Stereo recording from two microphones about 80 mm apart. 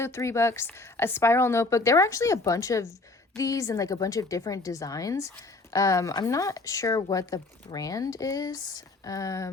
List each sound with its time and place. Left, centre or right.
0.0 s a woman's voice: left